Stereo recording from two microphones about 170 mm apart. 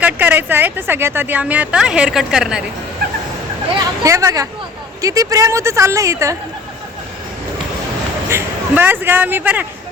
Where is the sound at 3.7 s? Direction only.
20° right (ahead or behind).